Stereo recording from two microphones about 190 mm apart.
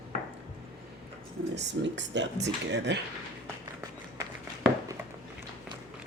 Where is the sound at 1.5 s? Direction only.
70° right (ahead or behind).